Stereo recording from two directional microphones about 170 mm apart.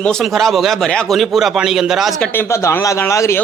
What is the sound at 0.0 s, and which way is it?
Speech, 5° left (ahead or behind).